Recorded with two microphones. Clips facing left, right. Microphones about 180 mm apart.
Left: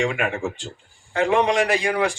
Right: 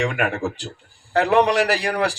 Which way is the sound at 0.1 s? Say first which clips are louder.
Right 1 dB; 65° right (ahead or behind).